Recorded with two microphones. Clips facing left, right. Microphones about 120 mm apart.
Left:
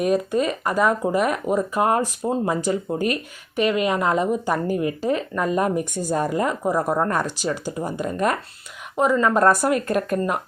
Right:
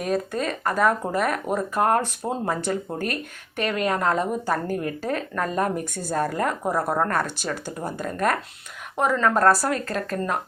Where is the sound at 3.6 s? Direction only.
10° left (ahead or behind).